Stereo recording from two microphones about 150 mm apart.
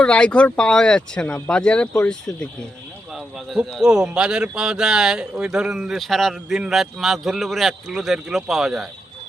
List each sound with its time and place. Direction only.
0.0 s a man's voice: 5° left (ahead or behind)